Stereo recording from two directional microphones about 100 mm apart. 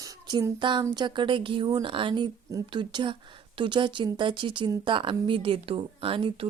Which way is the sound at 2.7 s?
55° right (ahead or behind).